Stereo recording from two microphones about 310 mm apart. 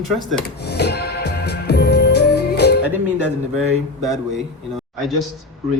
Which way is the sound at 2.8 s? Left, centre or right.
Centre.